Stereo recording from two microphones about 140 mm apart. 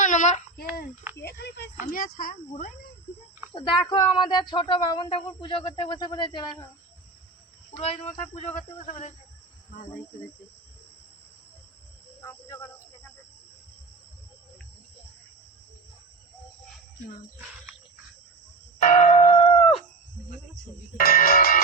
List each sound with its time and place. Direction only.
0.0 s a child's voice: 60° left (ahead or behind); by 0.9 s 90° left
1.9 s speech: 80° left
3.5 s speech: 35° left (ahead or behind)
8.4 s speech: 50° left (ahead or behind)
12.2 s cricket: 20° left (ahead or behind)
18.8 s church bell: 60° left (ahead or behind)
19.1 s a sound: 40° left (ahead or behind)
21.0 s music: 90° left